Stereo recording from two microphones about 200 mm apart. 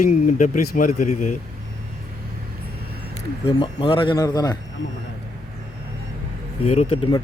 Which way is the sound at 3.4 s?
25° left (ahead or behind).